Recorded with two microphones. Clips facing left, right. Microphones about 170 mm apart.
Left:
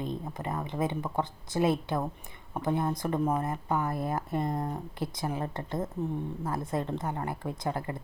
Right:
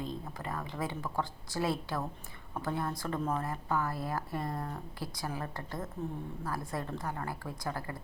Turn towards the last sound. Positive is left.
turn(degrees=25)  # may be behind; listen again after turning